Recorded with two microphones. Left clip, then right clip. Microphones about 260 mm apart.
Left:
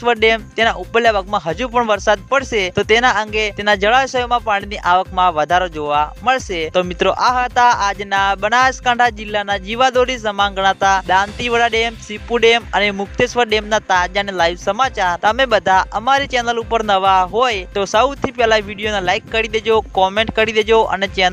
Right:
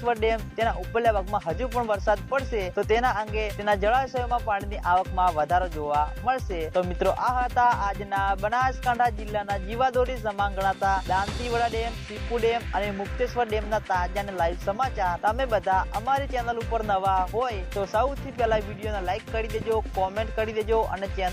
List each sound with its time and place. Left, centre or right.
0.0 s music: left